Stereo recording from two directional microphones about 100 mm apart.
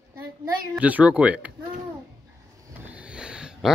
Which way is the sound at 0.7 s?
15° right (ahead or behind).